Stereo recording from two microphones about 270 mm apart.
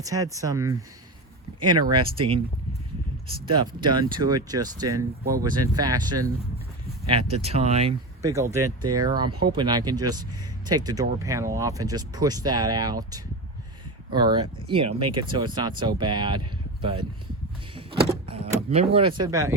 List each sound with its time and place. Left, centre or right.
0.0 s speech: centre
3.6 s speech: centre
8.2 s speech: centre